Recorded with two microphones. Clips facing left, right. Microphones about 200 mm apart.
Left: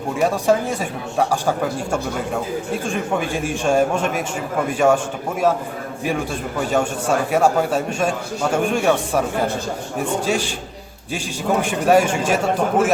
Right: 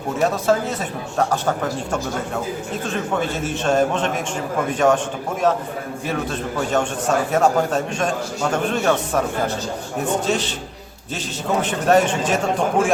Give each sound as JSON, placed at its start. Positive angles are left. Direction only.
{"t": 0.2, "sound": "a man's voice", "side_deg": 10}
{"t": 6.7, "sound": "a man's voice", "side_deg": 10}
{"t": 11.6, "sound": "a man's voice", "side_deg": 10}